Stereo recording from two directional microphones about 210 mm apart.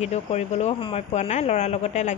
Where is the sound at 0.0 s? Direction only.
30° left (ahead or behind).